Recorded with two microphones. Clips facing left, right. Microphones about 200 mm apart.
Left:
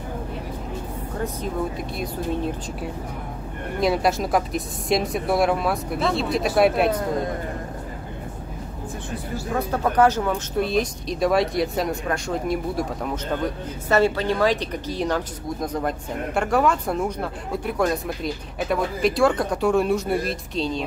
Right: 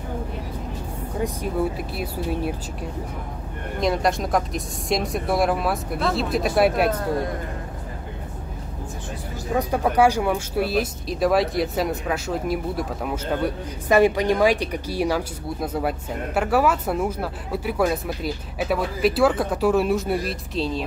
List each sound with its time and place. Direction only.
1.2 s speech: 10° right (ahead or behind)
3.8 s speech: 5° left (ahead or behind)
9.6 s speech: 10° right (ahead or behind)